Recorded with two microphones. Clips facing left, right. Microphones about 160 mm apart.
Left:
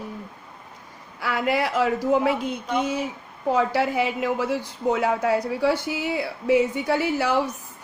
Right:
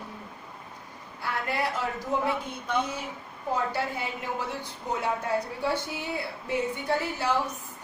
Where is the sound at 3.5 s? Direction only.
90° left.